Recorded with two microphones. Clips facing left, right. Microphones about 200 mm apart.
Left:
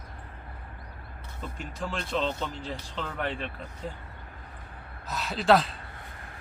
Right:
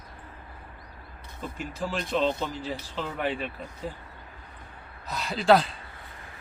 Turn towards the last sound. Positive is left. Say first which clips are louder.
# right 2 dB
turn(degrees=0)  # may be behind; listen again after turning